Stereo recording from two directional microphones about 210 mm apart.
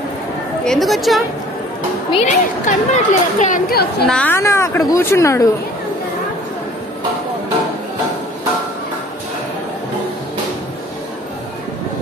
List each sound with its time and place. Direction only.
0.7 s a woman's voice: centre (ahead or behind)
2.0 s a woman's voice: 35° left (ahead or behind)
4.1 s speech: 10° left (ahead or behind)